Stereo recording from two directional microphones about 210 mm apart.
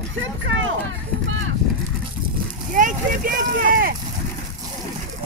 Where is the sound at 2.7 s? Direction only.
40° right (ahead or behind).